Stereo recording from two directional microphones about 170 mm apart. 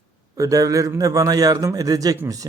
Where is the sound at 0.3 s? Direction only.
20° right (ahead or behind).